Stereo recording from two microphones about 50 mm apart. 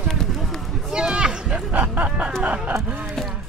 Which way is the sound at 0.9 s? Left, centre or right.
Centre.